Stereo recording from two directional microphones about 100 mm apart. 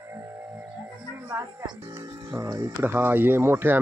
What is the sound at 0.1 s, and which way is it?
Music, 25° right (ahead or behind).